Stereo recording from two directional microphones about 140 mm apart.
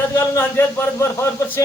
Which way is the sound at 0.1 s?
15° left (ahead or behind).